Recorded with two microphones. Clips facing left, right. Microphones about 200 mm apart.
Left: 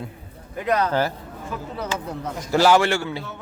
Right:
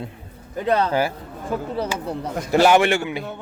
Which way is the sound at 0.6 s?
30° right (ahead or behind).